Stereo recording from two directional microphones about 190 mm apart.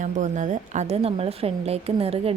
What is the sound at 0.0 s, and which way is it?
A woman's voice, 40° right (ahead or behind).